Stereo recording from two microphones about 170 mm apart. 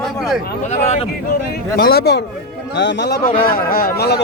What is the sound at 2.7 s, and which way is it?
Speech, 90° left.